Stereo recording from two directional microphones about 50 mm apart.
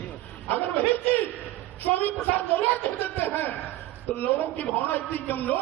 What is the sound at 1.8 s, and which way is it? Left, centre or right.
A man's voice, left.